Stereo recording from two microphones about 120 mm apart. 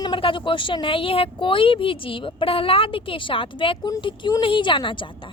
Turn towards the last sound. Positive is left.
turn(degrees=40)  # may be behind; listen again after turning